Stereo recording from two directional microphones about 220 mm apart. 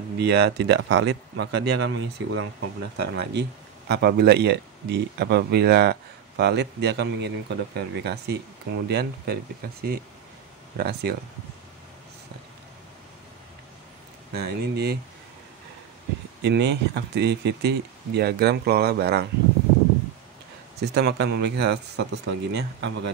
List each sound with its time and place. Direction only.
0.2 s speech: 50° right (ahead or behind)
14.3 s speech: 45° right (ahead or behind)
16.4 s speech: 50° right (ahead or behind)
20.8 s speech: 45° right (ahead or behind)